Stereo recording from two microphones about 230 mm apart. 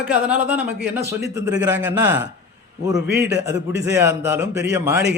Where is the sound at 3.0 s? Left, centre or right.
Right.